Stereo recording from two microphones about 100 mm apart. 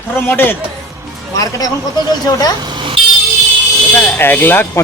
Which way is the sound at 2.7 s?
55° right (ahead or behind).